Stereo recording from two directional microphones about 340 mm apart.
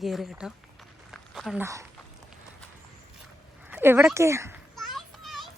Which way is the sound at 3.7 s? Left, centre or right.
Centre.